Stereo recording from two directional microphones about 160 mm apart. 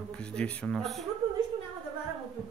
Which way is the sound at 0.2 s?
5° left (ahead or behind).